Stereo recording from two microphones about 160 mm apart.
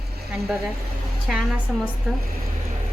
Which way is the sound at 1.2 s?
Centre (ahead or behind).